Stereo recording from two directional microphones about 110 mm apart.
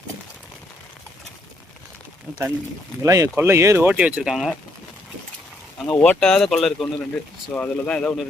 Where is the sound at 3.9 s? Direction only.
10° right (ahead or behind).